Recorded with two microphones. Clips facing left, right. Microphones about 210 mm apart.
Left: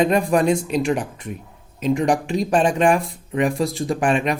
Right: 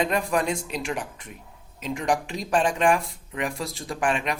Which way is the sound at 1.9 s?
35° left (ahead or behind).